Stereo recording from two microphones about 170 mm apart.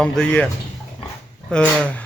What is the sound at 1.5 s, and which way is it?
Speech, 5° left (ahead or behind).